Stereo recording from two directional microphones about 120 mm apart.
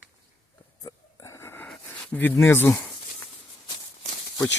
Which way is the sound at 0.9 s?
30° left (ahead or behind).